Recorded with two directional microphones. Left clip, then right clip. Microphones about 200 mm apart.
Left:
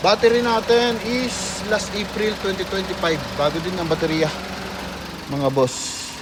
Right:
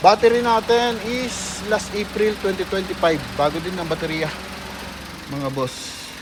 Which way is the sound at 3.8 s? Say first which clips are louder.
Left 5 dB; 20° left (ahead or behind).